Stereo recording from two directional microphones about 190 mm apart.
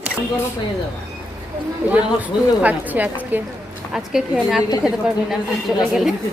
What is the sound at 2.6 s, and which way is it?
A woman's voice, 10° right (ahead or behind).